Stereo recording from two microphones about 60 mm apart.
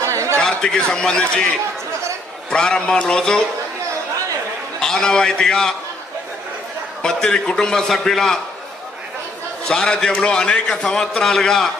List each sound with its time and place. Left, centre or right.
0.0 s a sound: right
0.3 s a man's voice: centre
4.8 s a man's voice: centre
7.0 s a man's voice: centre
9.6 s a man's voice: centre